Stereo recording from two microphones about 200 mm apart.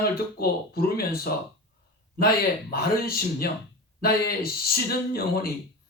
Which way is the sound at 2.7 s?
50° left (ahead or behind).